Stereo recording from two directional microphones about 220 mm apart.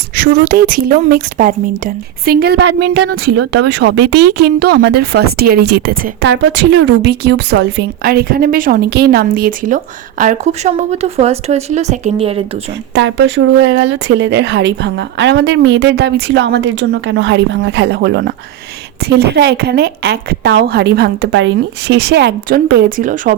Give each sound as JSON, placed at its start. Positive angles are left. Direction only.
{"t": 0.2, "sound": "speech", "side_deg": -40}
{"t": 12.9, "sound": "speech", "side_deg": -55}